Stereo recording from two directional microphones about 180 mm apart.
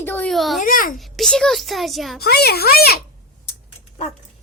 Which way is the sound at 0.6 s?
50° left (ahead or behind).